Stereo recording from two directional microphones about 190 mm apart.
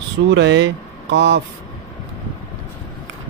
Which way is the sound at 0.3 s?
70° right (ahead or behind).